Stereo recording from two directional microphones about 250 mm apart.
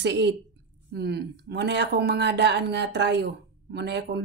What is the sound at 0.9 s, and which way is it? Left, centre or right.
Speech, right.